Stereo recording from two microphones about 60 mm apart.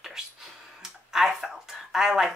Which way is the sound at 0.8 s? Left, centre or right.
Centre.